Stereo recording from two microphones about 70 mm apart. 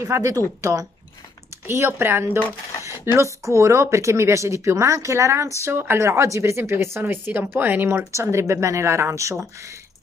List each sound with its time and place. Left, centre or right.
0.0 s speech: right
1.7 s speech: right
3.1 s speech: right
8.1 s speech: right